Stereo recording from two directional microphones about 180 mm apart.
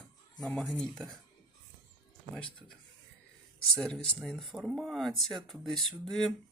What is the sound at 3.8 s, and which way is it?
Speech, centre (ahead or behind).